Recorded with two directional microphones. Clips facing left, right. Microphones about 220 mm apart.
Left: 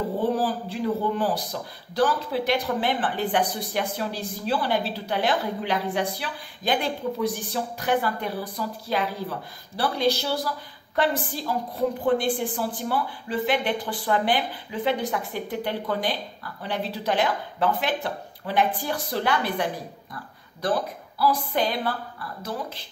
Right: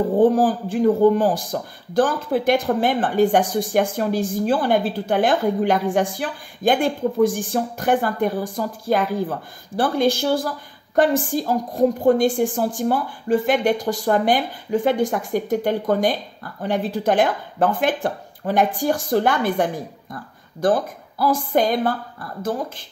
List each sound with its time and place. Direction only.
0.2 s a man's voice: 45° right (ahead or behind)